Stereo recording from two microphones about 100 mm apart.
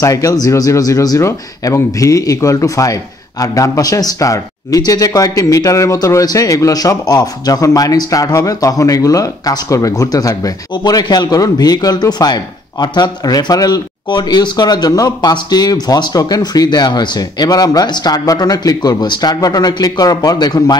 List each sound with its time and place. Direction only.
0.0 s speech: 35° left (ahead or behind)